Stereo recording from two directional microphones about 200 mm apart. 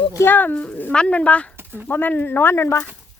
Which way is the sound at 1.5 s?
10° right (ahead or behind).